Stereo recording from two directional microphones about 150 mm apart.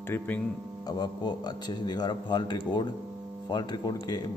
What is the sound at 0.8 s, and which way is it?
A man's voice, 25° left (ahead or behind).